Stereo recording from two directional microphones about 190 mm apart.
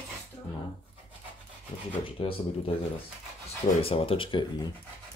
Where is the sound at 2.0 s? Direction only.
30° left (ahead or behind).